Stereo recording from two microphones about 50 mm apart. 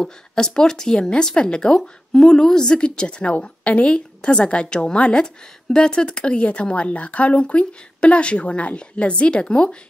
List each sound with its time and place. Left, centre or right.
0.0 s a woman's voice: centre